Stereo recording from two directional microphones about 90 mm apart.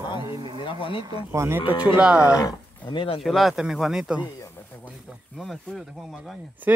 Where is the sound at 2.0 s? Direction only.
10° right (ahead or behind).